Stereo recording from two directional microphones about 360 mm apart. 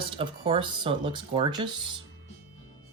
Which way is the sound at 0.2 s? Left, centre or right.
Centre.